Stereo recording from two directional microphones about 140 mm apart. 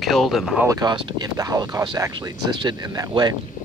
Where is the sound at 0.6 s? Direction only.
25° right (ahead or behind).